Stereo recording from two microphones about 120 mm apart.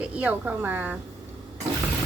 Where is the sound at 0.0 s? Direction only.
10° right (ahead or behind).